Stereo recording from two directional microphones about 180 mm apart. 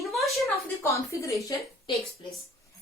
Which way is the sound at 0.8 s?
15° left (ahead or behind).